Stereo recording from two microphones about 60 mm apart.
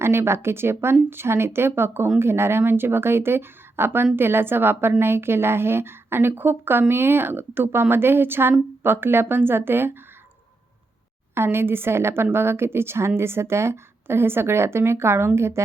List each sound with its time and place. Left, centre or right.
0.0 s a woman's voice: right
11.3 s a woman's voice: right